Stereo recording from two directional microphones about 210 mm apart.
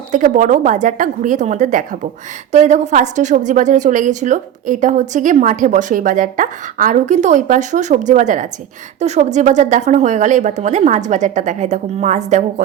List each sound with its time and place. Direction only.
0.1 s a woman's voice: 35° right (ahead or behind)